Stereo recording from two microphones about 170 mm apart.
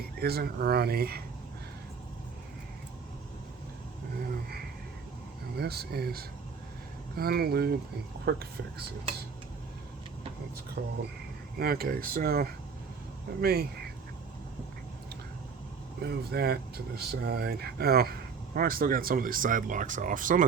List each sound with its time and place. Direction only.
0.2 s speech: 65° right (ahead or behind)
5.5 s speech: 70° right (ahead or behind)
10.8 s speech: 90° right
11.6 s speech: 65° right (ahead or behind)
16.0 s speech: 70° right (ahead or behind); by 20.4 s 50° right (ahead or behind)